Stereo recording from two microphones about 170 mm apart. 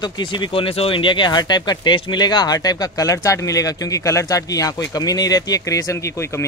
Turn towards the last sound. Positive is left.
turn(degrees=15)  # may be behind; listen again after turning